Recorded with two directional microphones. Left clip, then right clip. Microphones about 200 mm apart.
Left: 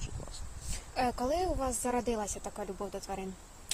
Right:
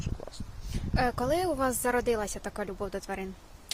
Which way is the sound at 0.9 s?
30° right (ahead or behind).